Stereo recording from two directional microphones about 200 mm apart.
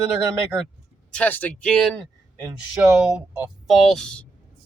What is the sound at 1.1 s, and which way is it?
Speech, 10° left (ahead or behind).